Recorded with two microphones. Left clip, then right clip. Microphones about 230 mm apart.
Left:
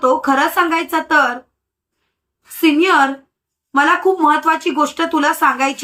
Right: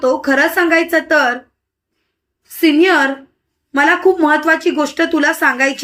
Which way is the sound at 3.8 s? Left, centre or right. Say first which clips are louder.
Right 1 dB; centre.